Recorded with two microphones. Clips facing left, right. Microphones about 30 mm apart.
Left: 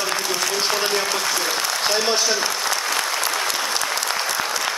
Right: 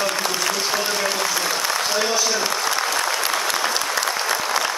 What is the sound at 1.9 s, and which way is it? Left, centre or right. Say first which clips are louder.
Applause: left 3 dB; left.